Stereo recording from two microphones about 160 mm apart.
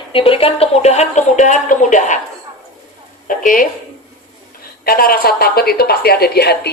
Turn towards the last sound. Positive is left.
turn(degrees=85)